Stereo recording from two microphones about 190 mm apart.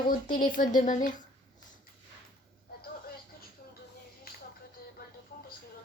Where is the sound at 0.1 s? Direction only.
45° left (ahead or behind).